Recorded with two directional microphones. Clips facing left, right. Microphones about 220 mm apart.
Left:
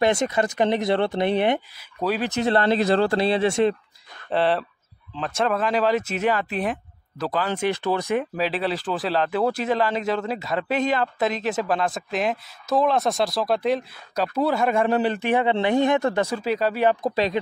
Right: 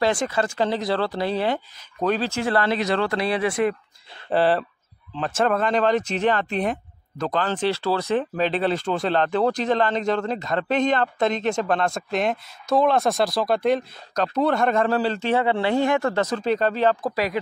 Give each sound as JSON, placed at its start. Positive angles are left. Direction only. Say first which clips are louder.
{"t": 0.0, "sound": "speech", "louder": "left 1 dB", "side_deg": 20}
{"t": 4.3, "sound": "speech", "louder": "right 2 dB", "side_deg": 0}